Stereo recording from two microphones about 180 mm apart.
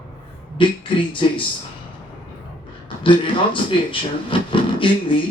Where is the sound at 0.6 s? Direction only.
30° left (ahead or behind).